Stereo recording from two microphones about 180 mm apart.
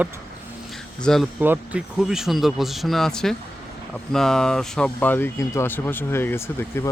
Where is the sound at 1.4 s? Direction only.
10° right (ahead or behind).